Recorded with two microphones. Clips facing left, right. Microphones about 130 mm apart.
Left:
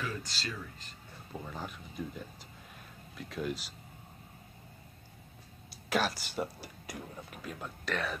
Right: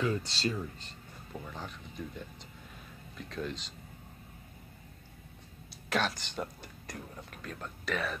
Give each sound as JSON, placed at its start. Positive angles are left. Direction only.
{"t": 0.0, "sound": "speech", "side_deg": -30}
{"t": 1.4, "sound": "speech", "side_deg": 10}
{"t": 5.9, "sound": "speech", "side_deg": 5}